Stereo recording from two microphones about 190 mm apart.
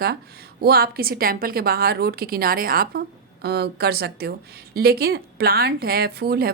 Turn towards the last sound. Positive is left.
turn(degrees=-55)  # may be behind; listen again after turning